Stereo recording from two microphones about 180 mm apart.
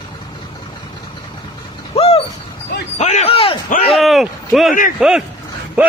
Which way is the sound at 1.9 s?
35° left (ahead or behind).